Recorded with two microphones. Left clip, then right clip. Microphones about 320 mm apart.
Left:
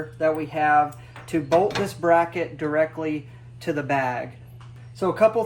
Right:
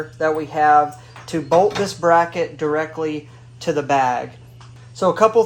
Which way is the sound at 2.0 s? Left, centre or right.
Centre.